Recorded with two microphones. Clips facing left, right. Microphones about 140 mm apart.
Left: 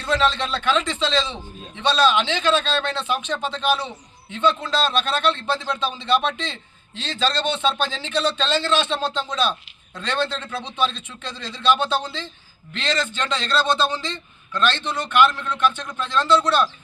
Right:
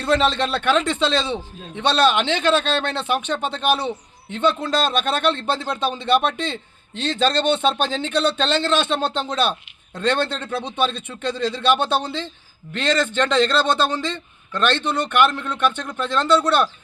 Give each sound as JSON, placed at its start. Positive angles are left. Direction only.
{"t": 0.0, "sound": "a man's voice", "side_deg": -55}